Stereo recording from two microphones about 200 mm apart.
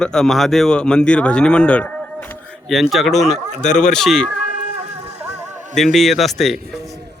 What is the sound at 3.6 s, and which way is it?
Speech, 35° left (ahead or behind).